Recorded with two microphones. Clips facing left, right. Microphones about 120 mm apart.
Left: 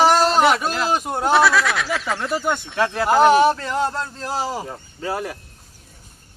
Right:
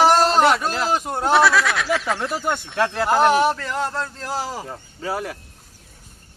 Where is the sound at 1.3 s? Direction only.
Centre (ahead or behind); by 4.6 s 20° left (ahead or behind).